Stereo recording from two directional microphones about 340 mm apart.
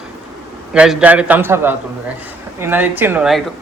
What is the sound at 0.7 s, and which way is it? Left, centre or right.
A man's voice, centre.